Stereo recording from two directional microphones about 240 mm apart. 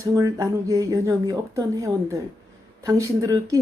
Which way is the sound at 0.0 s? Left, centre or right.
Centre.